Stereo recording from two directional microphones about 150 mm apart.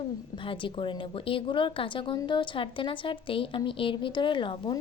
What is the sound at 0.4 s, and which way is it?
A woman's voice, 35° left (ahead or behind).